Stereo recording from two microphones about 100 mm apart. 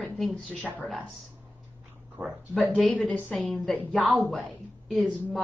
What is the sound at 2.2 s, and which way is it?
Speech, 20° right (ahead or behind).